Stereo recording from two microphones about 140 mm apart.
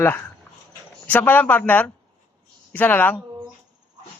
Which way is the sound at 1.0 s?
15° left (ahead or behind).